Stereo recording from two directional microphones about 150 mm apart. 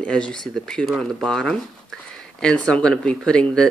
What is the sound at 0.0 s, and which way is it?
Speech, 5° left (ahead or behind).